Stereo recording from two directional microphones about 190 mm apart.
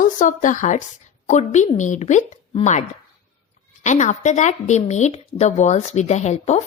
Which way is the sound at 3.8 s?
40° left (ahead or behind).